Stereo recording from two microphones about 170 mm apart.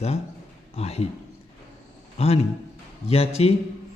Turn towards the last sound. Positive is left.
turn(degrees=35)  # may be behind; listen again after turning